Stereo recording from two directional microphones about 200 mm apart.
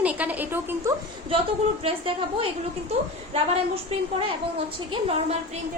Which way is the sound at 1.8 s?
25° right (ahead or behind).